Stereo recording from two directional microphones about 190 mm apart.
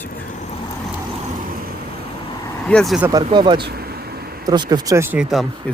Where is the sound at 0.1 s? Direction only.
45° left (ahead or behind).